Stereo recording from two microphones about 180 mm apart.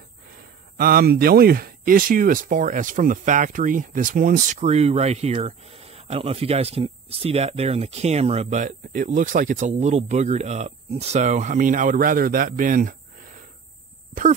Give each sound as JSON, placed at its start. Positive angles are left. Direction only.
{"t": 0.7, "sound": "speech", "side_deg": -55}